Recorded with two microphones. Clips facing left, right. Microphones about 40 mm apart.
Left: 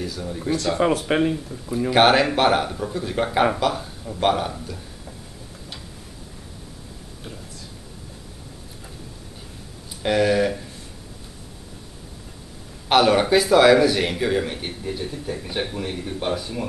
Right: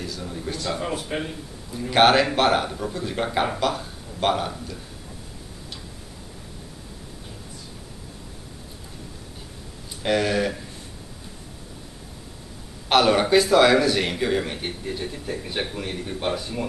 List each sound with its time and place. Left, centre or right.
0.0 s speech: centre
0.7 s speech: left
1.9 s speech: centre
10.0 s speech: centre
12.8 s speech: centre